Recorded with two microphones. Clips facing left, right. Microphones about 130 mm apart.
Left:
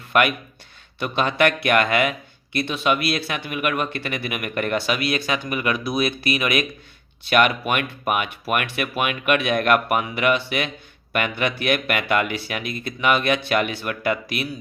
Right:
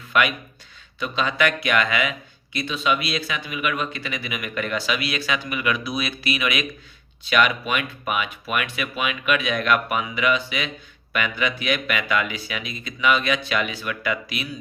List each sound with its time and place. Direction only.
0.1 s a man's voice: 50° left (ahead or behind)